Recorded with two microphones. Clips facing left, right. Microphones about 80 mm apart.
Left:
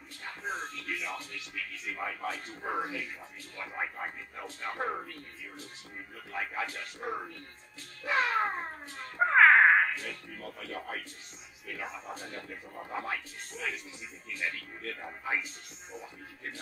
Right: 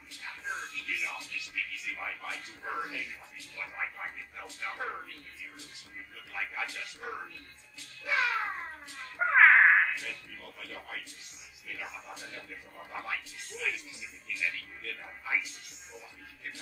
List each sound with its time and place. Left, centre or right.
0.2 s speech: left
6.1 s a child's voice: left
9.3 s a sound: centre
9.9 s speech: left